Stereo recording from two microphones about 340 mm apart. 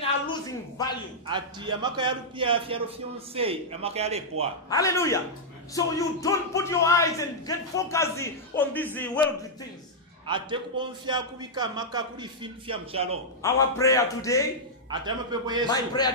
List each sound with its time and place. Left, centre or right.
0.0 s a sound: centre
1.2 s a man's voice: centre
4.6 s speech: centre
8.9 s a sound: centre
10.2 s a man's voice: centre
13.4 s speech: centre
14.9 s a man's voice: centre
15.7 s speech: centre